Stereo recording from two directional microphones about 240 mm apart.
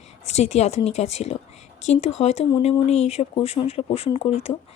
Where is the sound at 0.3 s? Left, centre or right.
Left.